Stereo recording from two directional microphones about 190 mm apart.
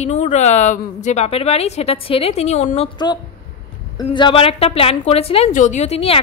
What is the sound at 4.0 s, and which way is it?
A woman's voice, 25° left (ahead or behind).